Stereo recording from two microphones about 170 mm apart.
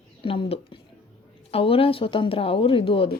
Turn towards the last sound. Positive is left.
turn(degrees=30)  # may be behind; listen again after turning